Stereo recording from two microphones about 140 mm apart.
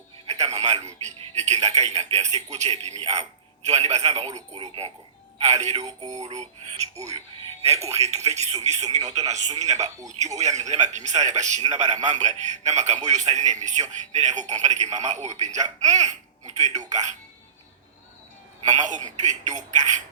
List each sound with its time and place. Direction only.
0.3 s a sound: 50° right (ahead or behind)
1.6 s a man's voice: 55° right (ahead or behind)
5.7 s speech: 25° right (ahead or behind)
6.2 s a man's voice: 55° right (ahead or behind)
9.0 s speech: 25° right (ahead or behind)
10.1 s speech: 55° right (ahead or behind)
18.6 s speech: 60° right (ahead or behind)